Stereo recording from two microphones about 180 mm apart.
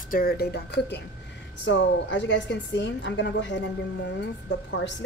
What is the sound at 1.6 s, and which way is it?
A woman's voice, 80° left.